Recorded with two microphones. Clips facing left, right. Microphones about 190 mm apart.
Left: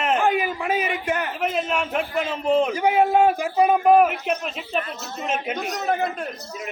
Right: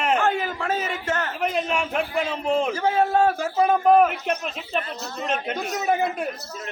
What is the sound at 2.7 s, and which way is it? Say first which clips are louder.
A man's voice: left 2 dB; 15° left (ahead or behind).